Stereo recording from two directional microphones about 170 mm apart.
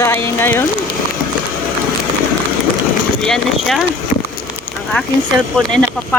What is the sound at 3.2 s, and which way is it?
Speech, centre (ahead or behind).